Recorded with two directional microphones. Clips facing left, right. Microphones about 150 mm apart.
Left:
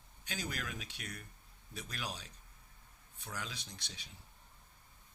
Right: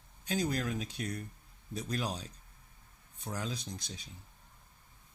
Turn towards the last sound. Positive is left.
turn(degrees=-40)  # may be behind; listen again after turning